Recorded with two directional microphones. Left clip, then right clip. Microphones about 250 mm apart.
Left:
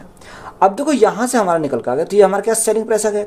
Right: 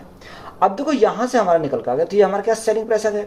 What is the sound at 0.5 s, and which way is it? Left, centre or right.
A woman's voice, left.